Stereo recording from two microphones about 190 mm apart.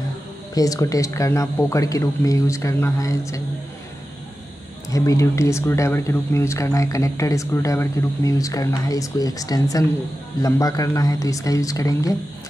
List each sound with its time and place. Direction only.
0.6 s speech: 20° left (ahead or behind)
4.9 s speech: 15° left (ahead or behind)